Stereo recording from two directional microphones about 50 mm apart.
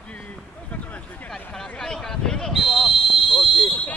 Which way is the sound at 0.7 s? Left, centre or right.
Left.